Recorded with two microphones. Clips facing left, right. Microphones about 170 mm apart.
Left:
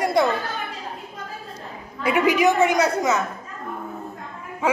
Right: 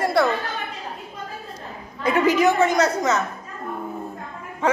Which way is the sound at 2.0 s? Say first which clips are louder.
Even; 15° left (ahead or behind).